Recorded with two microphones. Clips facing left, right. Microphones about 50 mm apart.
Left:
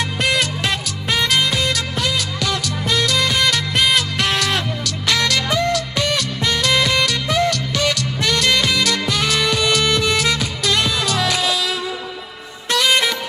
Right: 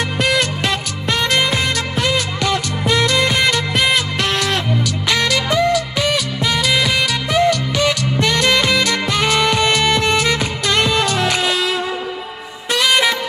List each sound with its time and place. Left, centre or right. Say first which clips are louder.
1.3 s music: right 1 dB; right
5.1 s music: right 2 dB; centre
7.3 s music: right 6 dB; centre; by 11.5 s right